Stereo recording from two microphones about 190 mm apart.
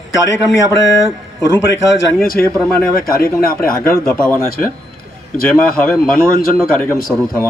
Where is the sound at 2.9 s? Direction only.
50° left (ahead or behind).